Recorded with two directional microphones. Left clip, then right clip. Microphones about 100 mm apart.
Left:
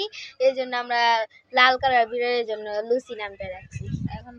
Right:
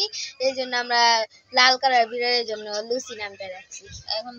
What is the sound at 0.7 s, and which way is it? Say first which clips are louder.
Speech: right 2 dB; 15° left (ahead or behind).